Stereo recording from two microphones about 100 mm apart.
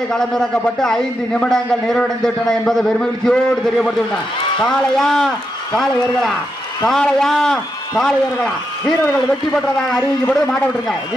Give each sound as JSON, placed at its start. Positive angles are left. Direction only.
{"t": 0.1, "sound": "a man's voice", "side_deg": 5}
{"t": 4.9, "sound": "a man's voice", "side_deg": 5}
{"t": 6.9, "sound": "a man's voice", "side_deg": 5}
{"t": 9.5, "sound": "a man's voice", "side_deg": 5}
{"t": 9.9, "sound": "a man's voice", "side_deg": 15}